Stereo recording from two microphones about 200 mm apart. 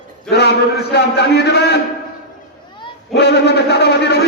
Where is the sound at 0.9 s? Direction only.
55° left (ahead or behind).